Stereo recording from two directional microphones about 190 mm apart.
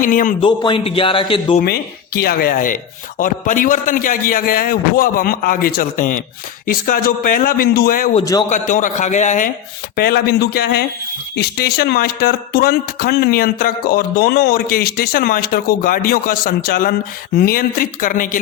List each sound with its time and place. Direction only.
0.0 s speech: 45° left (ahead or behind)
0.4 s a man's voice: 25° left (ahead or behind)
1.5 s speech: 55° left (ahead or behind)
8.2 s a man's voice: 20° left (ahead or behind)
8.4 s a man's voice: 40° left (ahead or behind)
9.9 s speech: 55° left (ahead or behind)